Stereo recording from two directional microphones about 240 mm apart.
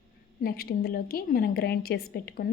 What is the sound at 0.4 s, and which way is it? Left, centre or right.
Speech, left.